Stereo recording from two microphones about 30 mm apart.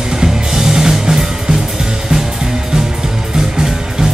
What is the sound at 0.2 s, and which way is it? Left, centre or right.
Music, centre.